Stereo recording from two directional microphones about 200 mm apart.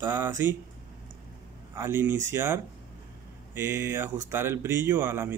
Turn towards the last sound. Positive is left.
turn(degrees=-10)  # may be behind; listen again after turning